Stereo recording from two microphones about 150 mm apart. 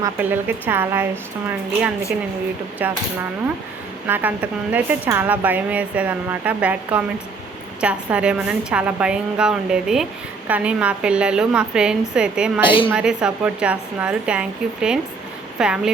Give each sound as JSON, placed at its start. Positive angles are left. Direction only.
{"t": 0.0, "sound": "speech", "side_deg": -10}
{"t": 4.0, "sound": "speech", "side_deg": -10}
{"t": 12.6, "sound": "a woman's voice", "side_deg": 35}
{"t": 12.9, "sound": "speech", "side_deg": -5}